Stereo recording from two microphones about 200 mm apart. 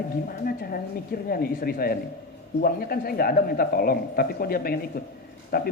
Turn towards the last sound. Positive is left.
turn(degrees=50)  # may be behind; listen again after turning